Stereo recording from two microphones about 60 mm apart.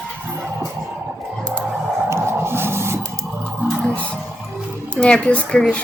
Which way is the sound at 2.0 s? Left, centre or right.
Right.